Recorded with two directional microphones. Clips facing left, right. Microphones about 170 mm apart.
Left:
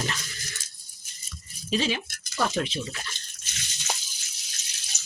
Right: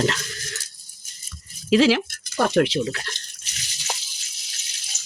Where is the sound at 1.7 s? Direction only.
90° right.